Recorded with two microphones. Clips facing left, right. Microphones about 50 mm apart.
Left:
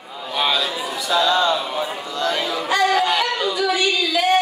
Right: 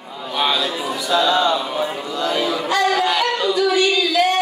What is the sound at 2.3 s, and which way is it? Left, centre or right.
Music, centre.